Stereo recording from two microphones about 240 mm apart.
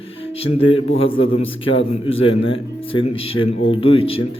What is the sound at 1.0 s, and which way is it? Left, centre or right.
Speech, left.